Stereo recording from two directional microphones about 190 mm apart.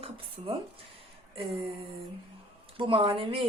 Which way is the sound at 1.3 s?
30° right (ahead or behind).